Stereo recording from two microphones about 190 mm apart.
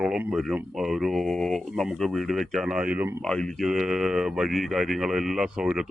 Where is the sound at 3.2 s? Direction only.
5° left (ahead or behind).